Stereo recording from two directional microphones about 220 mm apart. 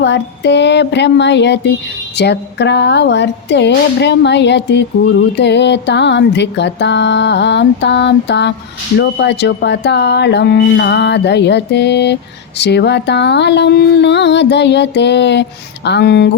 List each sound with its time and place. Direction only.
0.0 s speech: 50° left (ahead or behind)